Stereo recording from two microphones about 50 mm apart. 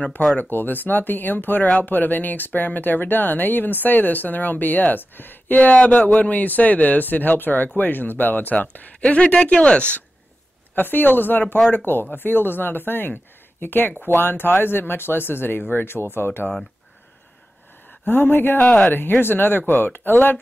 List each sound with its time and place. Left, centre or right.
0.4 s speech: left
9.0 s speech: left
10.7 s speech: left
18.0 s speech: left